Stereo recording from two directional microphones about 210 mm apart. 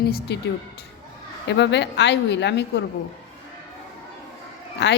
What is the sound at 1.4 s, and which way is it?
A woman's voice, 55° left (ahead or behind).